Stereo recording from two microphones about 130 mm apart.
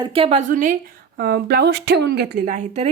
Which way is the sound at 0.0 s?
45° right (ahead or behind).